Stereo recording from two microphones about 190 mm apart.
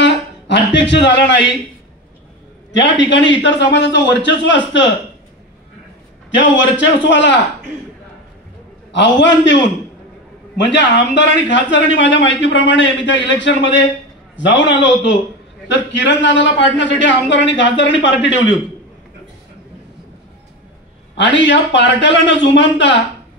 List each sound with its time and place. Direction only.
0.0 s a sound: 70° left (ahead or behind)
2.7 s a man's voice: 70° left (ahead or behind)
6.3 s a man's voice: 70° left (ahead or behind)
8.9 s a man's voice: 70° left (ahead or behind)
21.2 s a man's voice: 70° left (ahead or behind)